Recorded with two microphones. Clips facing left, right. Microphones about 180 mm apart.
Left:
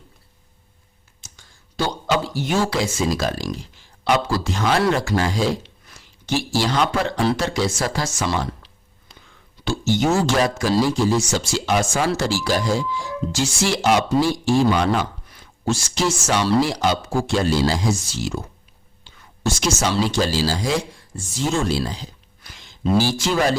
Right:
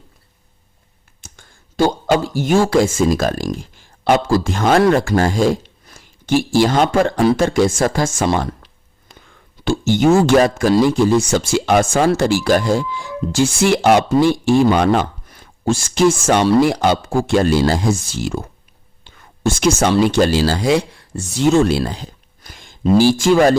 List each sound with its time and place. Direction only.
1.2 s speech: 50° right (ahead or behind)